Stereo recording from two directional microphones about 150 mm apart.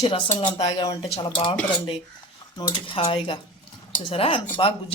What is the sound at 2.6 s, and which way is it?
Speech, 35° left (ahead or behind).